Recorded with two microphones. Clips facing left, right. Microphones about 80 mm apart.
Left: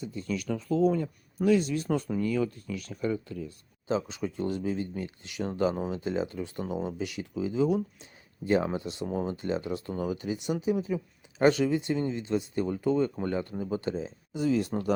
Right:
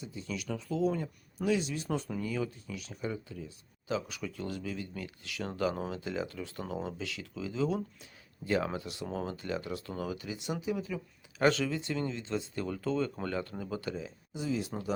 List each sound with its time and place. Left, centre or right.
0.0 s speech: left
3.8 s speech: left
14.3 s speech: left